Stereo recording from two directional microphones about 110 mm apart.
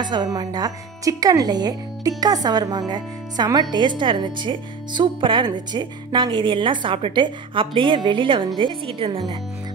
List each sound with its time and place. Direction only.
0.0 s a woman's voice: 40° right (ahead or behind); by 9.2 s 55° right (ahead or behind)